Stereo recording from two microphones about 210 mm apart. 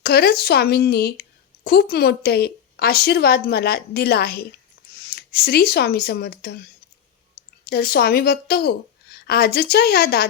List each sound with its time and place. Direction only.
0.0 s a woman's voice: 50° left (ahead or behind)